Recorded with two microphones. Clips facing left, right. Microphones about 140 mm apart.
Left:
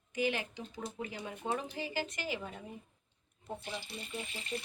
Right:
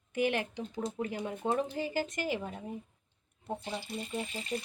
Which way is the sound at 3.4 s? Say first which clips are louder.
Right 4 dB; 25° right (ahead or behind).